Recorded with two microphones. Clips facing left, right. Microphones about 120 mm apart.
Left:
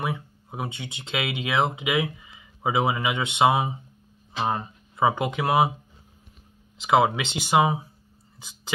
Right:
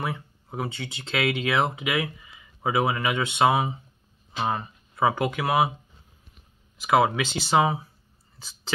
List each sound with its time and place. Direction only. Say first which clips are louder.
0.0 s speech: left 1 dB; 15° left (ahead or behind)
6.8 s speech: left 1 dB; 20° left (ahead or behind)
8.4 s a sound: even; 15° left (ahead or behind)